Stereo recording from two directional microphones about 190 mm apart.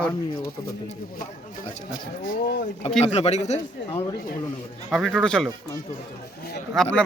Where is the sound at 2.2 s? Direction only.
55° left (ahead or behind).